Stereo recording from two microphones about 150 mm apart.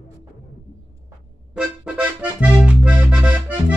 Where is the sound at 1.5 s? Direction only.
10° right (ahead or behind).